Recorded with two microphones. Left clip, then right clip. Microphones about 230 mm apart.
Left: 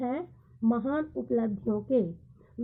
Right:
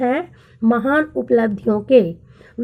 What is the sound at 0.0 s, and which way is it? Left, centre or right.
A woman's voice, right.